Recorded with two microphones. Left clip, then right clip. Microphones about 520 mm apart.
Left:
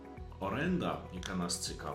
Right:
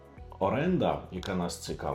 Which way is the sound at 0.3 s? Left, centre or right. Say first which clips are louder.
Right 8 dB; right.